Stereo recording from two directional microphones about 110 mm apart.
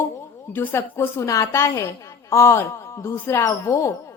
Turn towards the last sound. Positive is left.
turn(degrees=25)  # may be behind; listen again after turning